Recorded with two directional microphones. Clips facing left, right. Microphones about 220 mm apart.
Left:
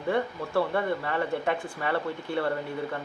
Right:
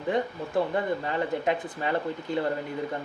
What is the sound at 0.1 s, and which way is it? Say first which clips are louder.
Speech: even; 15° right (ahead or behind).